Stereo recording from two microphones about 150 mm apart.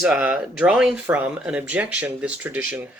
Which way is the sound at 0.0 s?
5° right (ahead or behind).